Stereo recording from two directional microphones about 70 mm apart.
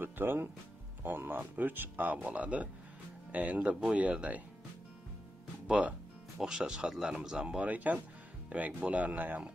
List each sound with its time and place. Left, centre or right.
0.0 s music: right
1.0 s speech: right
5.7 s music: centre
6.4 s speech: centre; by 9.5 s right